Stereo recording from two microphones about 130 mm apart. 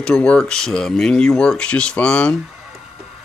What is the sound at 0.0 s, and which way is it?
Speech, 10° left (ahead or behind).